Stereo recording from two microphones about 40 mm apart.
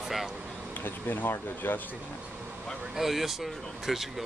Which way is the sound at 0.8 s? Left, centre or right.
Left.